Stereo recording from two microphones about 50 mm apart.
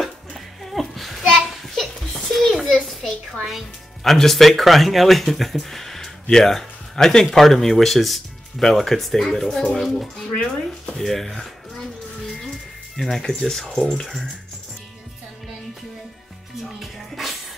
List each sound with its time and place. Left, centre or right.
0.7 s a child's voice: centre
1.7 s a sound: centre
3.5 s speech: centre
10.3 s speech: centre
11.0 s speech: centre
12.3 s music: centre
13.2 s speech: centre
16.8 s music: centre